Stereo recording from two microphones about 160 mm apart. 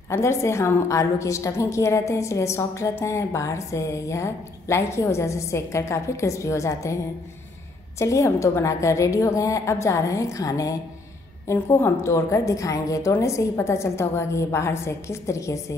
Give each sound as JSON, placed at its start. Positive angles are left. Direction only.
{"t": 0.1, "sound": "a woman's voice", "side_deg": 15}
{"t": 8.0, "sound": "a woman's voice", "side_deg": 20}